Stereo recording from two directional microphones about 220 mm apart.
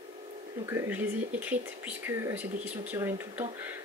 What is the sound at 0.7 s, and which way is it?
Speech, 10° right (ahead or behind).